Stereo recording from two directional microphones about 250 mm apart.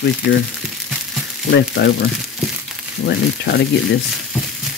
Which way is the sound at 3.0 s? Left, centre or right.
Left.